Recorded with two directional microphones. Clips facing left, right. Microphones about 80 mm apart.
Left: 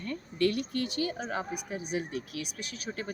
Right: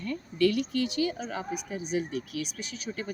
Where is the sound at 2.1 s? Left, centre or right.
Right.